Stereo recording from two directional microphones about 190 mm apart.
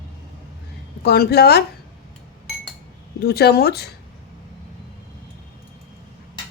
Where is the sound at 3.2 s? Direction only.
55° left (ahead or behind).